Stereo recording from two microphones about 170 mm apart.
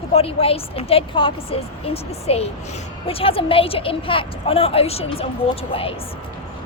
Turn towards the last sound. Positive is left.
turn(degrees=35)  # may be behind; listen again after turning